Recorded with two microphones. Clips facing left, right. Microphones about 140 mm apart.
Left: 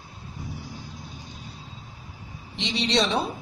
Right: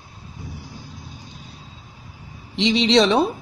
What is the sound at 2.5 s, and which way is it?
Speech, 85° right.